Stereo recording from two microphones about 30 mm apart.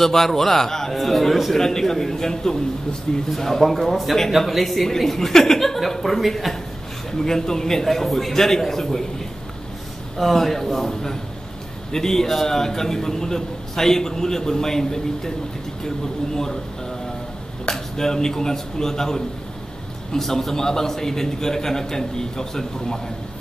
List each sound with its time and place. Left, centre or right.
0.0 s a man's voice: centre
3.6 s a man's voice: centre
7.1 s a man's voice: centre
10.1 s a man's voice: centre
17.6 s a man's voice: centre